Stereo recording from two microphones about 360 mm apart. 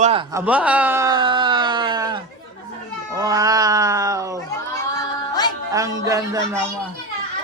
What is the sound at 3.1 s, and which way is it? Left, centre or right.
Snicker, centre.